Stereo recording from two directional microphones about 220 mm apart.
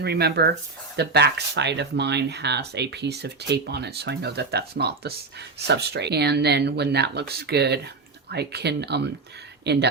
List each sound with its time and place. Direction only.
0.0 s speech: 45° right (ahead or behind)